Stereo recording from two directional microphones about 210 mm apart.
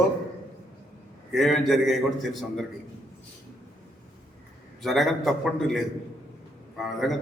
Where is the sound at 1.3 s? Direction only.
Centre (ahead or behind).